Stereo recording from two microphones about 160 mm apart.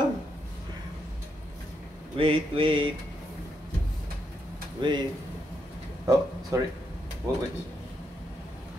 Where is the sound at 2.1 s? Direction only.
35° right (ahead or behind).